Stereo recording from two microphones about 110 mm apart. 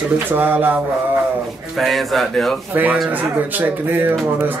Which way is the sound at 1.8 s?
Centre (ahead or behind).